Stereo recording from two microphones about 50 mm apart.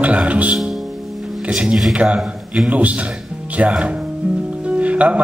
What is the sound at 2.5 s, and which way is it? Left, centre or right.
Speech, right.